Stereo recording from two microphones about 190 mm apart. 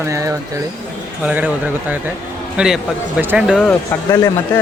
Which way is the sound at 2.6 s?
5° right (ahead or behind).